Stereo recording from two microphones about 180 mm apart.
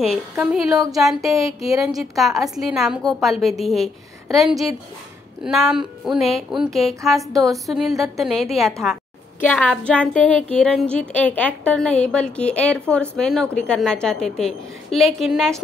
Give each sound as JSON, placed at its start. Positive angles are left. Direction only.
{"t": 0.4, "sound": "a woman's voice", "side_deg": -15}
{"t": 0.9, "sound": "a woman's voice", "side_deg": 0}
{"t": 5.7, "sound": "a woman's voice", "side_deg": -5}